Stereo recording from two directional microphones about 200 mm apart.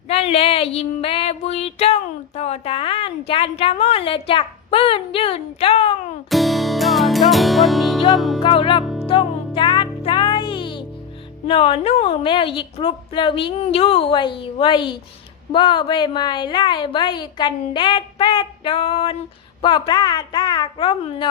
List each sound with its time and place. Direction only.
0.1 s female singing: 30° left (ahead or behind)
6.3 s music: centre (ahead or behind)
8.4 s female singing: 25° left (ahead or behind)
8.8 s music: centre (ahead or behind)
9.0 s music: 25° left (ahead or behind)
11.4 s female singing: 30° left (ahead or behind)